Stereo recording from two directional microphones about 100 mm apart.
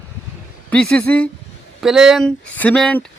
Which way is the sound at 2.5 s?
15° left (ahead or behind).